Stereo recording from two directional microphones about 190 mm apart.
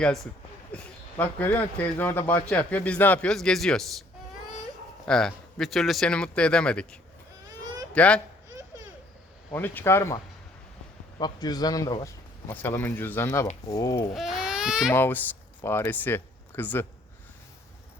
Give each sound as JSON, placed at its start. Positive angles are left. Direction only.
{"t": 0.7, "sound": "a sound", "side_deg": 5}
{"t": 1.1, "sound": "a man's voice", "side_deg": 10}
{"t": 5.0, "sound": "a man's voice", "side_deg": 5}
{"t": 9.5, "sound": "a man's voice", "side_deg": 10}
{"t": 11.2, "sound": "a man's voice", "side_deg": 20}
{"t": 14.1, "sound": "speech", "side_deg": 0}
{"t": 14.9, "sound": "speech", "side_deg": 10}